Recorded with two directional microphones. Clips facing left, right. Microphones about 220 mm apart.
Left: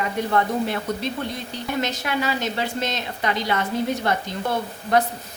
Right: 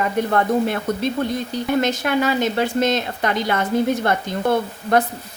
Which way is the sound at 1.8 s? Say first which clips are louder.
Right 3 dB; 50° right (ahead or behind).